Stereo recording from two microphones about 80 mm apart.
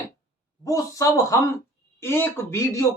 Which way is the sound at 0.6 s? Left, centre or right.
Left.